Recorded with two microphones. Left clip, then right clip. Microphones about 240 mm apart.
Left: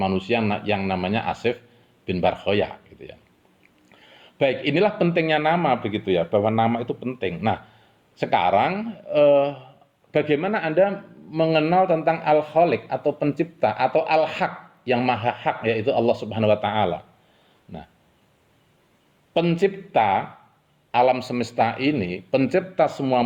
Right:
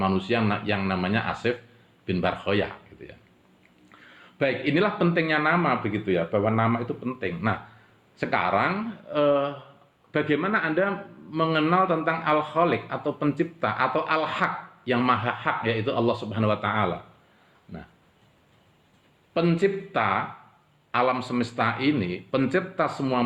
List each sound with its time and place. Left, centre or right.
0.0 s a man's voice: left
4.4 s a man's voice: left
19.3 s a man's voice: left